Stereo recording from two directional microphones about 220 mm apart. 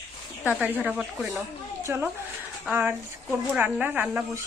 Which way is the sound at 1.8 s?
10° right (ahead or behind).